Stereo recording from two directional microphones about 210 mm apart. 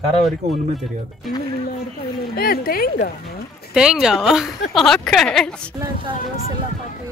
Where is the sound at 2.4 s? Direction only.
45° left (ahead or behind).